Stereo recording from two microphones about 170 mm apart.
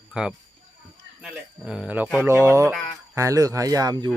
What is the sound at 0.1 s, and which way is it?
Speech, 5° right (ahead or behind).